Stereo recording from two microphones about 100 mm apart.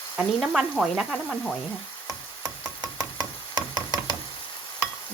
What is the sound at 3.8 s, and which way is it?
Knock, 40° right (ahead or behind).